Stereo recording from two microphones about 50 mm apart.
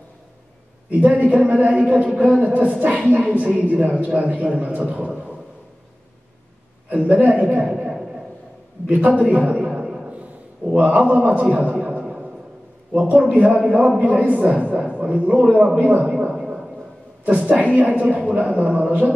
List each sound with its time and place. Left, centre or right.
0.8 s speech: right
6.9 s speech: right
8.8 s speech: right
10.7 s speech: right
12.0 s a sound: centre
12.9 s speech: right
15.8 s a sound: right
17.2 s speech: right